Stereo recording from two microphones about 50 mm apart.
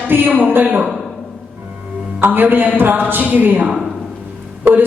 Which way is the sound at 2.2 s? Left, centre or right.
Right.